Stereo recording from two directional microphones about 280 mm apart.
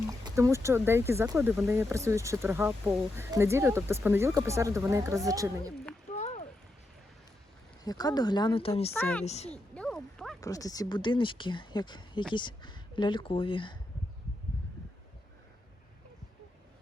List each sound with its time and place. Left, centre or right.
0.1 s speech: centre
6.1 s a sound: left
7.9 s speech: centre
8.9 s speech: centre
9.2 s speech: left
9.7 s speech: centre